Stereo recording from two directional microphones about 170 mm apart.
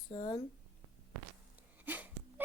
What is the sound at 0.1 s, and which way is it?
Speech, 35° left (ahead or behind).